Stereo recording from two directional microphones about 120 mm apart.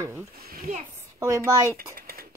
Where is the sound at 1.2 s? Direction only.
30° right (ahead or behind).